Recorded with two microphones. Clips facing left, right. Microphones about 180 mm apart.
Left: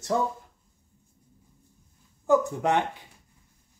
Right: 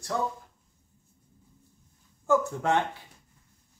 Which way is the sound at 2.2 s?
15° left (ahead or behind).